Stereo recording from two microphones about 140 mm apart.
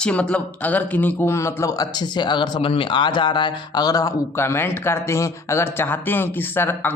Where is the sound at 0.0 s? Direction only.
10° left (ahead or behind).